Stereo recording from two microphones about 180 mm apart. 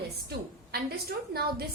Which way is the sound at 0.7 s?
60° right (ahead or behind).